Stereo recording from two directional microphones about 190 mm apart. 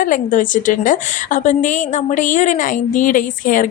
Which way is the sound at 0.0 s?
45° left (ahead or behind).